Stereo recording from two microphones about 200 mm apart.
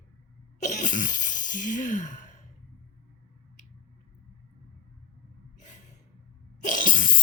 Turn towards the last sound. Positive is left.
turn(degrees=40)  # may be behind; listen again after turning